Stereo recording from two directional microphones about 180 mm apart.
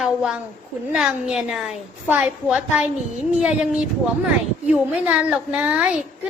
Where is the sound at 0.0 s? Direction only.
5° right (ahead or behind).